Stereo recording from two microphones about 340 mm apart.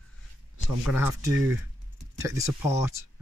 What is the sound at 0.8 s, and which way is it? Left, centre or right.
Speech, centre.